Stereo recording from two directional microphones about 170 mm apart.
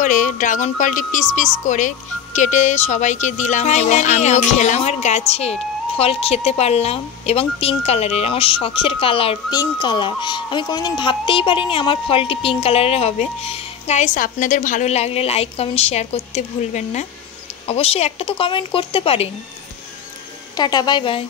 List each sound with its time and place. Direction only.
0.0 s speech: 50° left (ahead or behind)
20.5 s speech: 25° left (ahead or behind)